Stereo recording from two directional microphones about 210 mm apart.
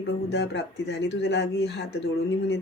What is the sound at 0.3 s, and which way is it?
Speech, 55° left (ahead or behind).